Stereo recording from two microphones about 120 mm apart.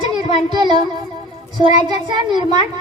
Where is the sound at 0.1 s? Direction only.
35° right (ahead or behind).